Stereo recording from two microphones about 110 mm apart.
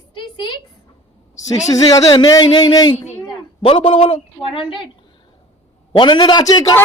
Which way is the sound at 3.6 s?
50° left (ahead or behind).